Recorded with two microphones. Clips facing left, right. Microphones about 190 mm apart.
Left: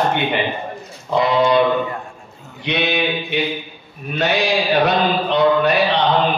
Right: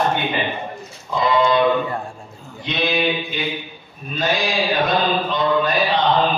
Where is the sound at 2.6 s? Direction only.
70° left (ahead or behind).